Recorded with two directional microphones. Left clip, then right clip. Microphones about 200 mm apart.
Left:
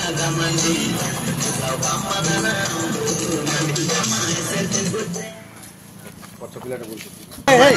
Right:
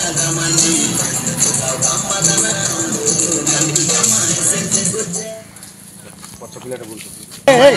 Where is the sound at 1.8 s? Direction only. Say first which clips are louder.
Right 5 dB; 60° right (ahead or behind).